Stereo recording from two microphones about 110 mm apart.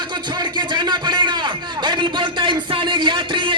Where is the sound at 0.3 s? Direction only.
45° right (ahead or behind).